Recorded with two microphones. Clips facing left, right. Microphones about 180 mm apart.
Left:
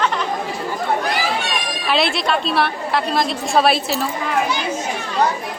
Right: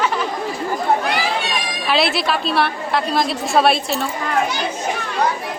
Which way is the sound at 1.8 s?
Centre (ahead or behind).